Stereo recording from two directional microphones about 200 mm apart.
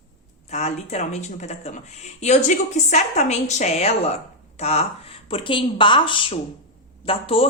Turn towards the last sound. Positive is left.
turn(degrees=25)  # may be behind; listen again after turning